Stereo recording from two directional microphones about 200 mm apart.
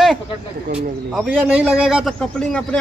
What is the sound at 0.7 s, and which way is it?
A man's voice, 5° right (ahead or behind).